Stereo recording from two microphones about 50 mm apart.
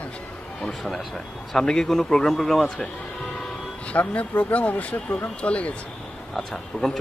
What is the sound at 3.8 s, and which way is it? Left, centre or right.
Speech, left.